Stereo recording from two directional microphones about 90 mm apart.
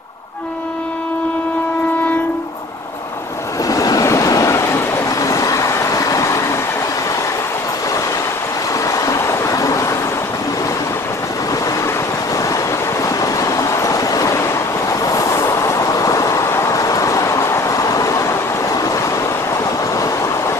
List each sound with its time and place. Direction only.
3.6 s vehicle: 40° left (ahead or behind)
8.7 s vehicle: 40° left (ahead or behind)
12.4 s train: 40° left (ahead or behind)